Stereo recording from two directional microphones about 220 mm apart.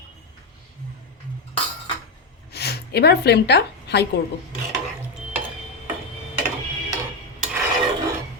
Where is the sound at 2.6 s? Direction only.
45° left (ahead or behind).